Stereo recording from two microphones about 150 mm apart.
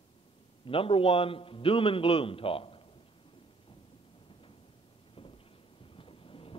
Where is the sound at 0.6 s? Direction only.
40° left (ahead or behind).